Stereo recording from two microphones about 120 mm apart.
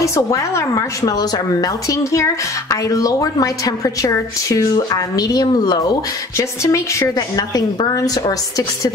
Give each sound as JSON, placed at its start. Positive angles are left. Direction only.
{"t": 0.0, "sound": "a woman's voice", "side_deg": 25}
{"t": 6.3, "sound": "a woman's voice", "side_deg": 25}